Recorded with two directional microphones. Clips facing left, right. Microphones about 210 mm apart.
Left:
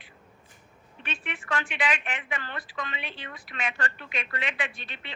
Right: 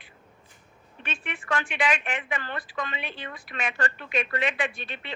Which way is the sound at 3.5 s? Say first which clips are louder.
Right 2 dB; 45° right (ahead or behind).